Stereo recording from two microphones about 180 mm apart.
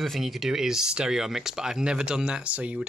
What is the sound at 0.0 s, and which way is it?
Speech, centre (ahead or behind).